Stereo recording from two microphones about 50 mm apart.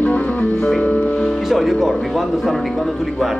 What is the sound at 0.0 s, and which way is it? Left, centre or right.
Music, left.